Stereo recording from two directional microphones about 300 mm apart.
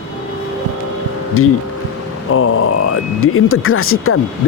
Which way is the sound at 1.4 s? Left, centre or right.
Left.